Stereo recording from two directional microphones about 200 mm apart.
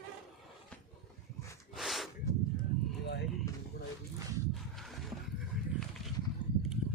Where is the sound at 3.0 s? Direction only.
55° left (ahead or behind).